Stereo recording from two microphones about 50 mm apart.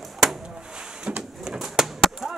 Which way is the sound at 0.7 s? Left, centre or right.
Centre.